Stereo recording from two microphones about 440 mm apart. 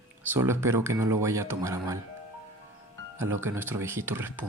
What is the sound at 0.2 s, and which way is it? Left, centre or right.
Speech, centre.